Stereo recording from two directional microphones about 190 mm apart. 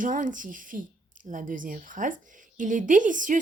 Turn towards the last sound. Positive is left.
turn(degrees=-45)  # may be behind; listen again after turning